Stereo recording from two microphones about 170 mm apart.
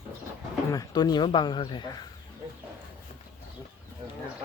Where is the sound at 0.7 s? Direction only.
20° left (ahead or behind).